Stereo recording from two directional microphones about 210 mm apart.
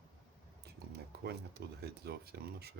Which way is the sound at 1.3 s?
50° right (ahead or behind).